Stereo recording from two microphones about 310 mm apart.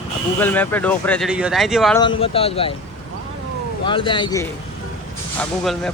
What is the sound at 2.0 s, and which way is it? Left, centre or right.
Speech, centre.